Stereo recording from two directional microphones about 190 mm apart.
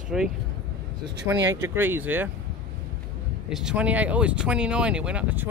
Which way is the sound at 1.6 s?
10° right (ahead or behind).